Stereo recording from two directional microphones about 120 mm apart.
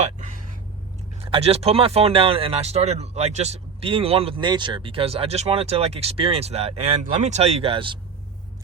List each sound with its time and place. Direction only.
0.0 s a sound: 90° right
1.2 s speech: 55° right (ahead or behind)
4.4 s speech: 40° right (ahead or behind)